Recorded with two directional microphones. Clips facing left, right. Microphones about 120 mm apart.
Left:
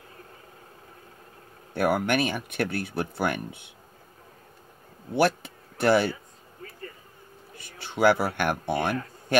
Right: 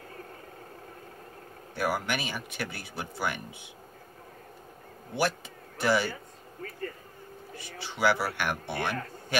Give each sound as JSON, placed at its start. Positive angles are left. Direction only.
{"t": 1.7, "sound": "speech", "side_deg": 55}
{"t": 5.1, "sound": "speech", "side_deg": 55}
{"t": 7.5, "sound": "speech", "side_deg": 55}